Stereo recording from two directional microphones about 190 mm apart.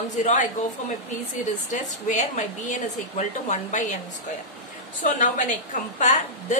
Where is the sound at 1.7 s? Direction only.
40° left (ahead or behind).